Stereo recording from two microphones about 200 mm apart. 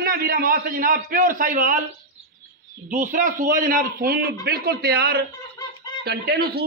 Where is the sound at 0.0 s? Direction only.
50° right (ahead or behind).